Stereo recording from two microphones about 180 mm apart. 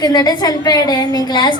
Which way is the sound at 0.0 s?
20° left (ahead or behind).